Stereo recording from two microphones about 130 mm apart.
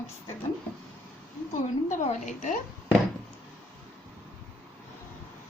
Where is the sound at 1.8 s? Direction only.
70° left (ahead or behind).